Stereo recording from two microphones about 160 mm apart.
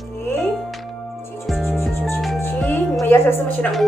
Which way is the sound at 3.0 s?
15° left (ahead or behind).